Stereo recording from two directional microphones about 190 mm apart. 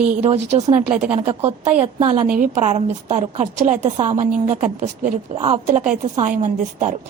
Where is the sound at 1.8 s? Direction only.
30° right (ahead or behind).